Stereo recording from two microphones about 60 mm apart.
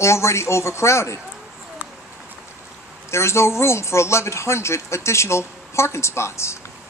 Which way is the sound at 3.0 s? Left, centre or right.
Left.